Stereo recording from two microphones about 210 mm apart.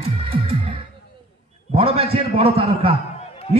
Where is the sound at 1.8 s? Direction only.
25° right (ahead or behind).